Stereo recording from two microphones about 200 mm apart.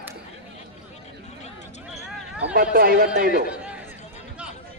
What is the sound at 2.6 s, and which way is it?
Speech, 45° right (ahead or behind).